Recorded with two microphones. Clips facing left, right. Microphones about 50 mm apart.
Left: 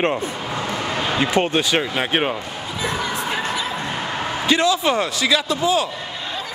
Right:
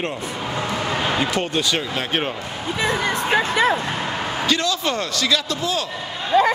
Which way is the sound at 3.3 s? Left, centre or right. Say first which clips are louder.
Right 6 dB; right.